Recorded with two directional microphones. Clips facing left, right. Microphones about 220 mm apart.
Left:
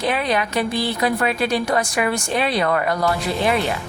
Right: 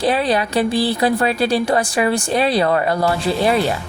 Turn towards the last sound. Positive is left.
turn(degrees=-35)  # may be behind; listen again after turning